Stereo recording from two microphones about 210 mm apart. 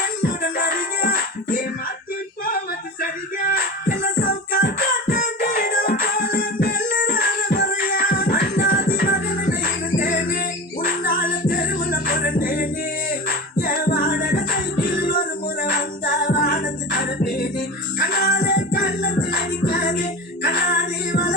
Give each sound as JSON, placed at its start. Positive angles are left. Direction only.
{"t": 0.0, "sound": "music", "side_deg": 45}
{"t": 3.5, "sound": "music", "side_deg": 40}